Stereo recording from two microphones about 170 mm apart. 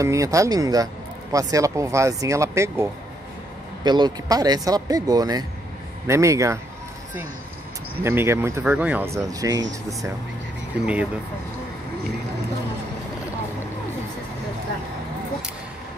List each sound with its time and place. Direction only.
0.0 s speech: 20° right (ahead or behind)
8.0 s speech: 15° right (ahead or behind)